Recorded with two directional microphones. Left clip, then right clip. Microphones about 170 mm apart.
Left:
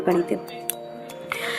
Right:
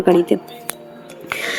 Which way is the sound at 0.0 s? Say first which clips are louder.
Right 8 dB; 25° right (ahead or behind).